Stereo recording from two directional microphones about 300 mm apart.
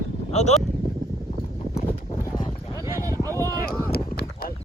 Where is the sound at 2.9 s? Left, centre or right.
Centre.